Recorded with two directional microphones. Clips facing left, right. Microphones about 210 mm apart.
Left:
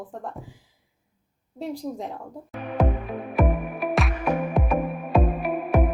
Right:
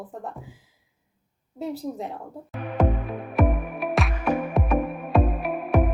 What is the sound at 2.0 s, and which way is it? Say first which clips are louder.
Music: even; centre (ahead or behind).